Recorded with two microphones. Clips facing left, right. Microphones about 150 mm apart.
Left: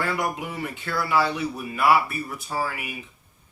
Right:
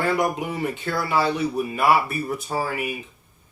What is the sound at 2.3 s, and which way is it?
Speech, 20° right (ahead or behind).